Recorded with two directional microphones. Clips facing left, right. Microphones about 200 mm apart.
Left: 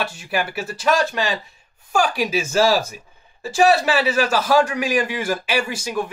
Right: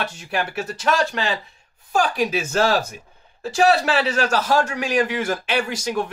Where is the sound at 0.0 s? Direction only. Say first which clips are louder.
Left 1 dB; 10° left (ahead or behind).